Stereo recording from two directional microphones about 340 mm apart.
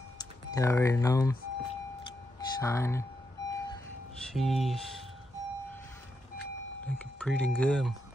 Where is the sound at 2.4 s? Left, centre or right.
Centre.